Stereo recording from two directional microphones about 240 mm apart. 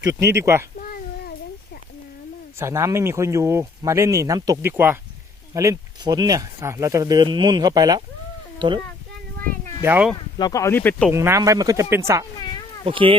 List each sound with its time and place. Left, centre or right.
0.0 s speech: centre
0.8 s a sound: left
2.6 s speech: centre
9.8 s speech: centre
10.3 s speech: centre
11.1 s speech: centre
12.8 s speech: right